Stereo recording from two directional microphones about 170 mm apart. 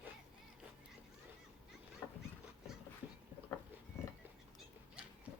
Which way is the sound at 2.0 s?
15° left (ahead or behind).